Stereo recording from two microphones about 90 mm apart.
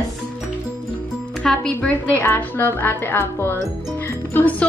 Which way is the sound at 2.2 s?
25° left (ahead or behind).